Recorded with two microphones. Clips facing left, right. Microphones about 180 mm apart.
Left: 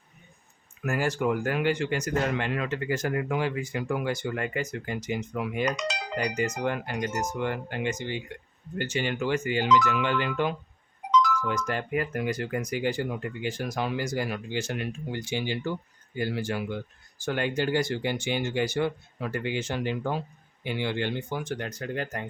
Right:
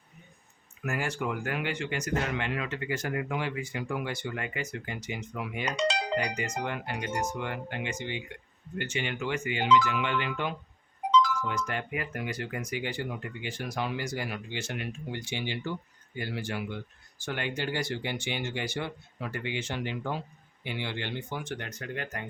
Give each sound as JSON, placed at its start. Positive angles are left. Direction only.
{"t": 0.9, "sound": "speech", "side_deg": 40}
{"t": 5.7, "sound": "speech", "side_deg": -30}
{"t": 6.1, "sound": "speech", "side_deg": 40}
{"t": 11.1, "sound": "music", "side_deg": -30}
{"t": 11.4, "sound": "speech", "side_deg": 40}